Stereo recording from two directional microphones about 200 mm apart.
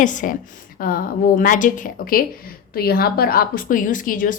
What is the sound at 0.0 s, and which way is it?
A woman's voice, 40° left (ahead or behind).